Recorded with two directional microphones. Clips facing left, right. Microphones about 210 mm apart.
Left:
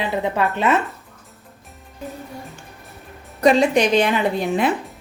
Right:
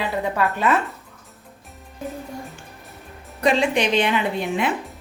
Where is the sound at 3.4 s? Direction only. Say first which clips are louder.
Left 4 dB; 40° left (ahead or behind).